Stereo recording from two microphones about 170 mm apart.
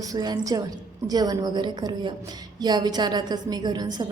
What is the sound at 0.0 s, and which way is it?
A woman's voice, 20° right (ahead or behind).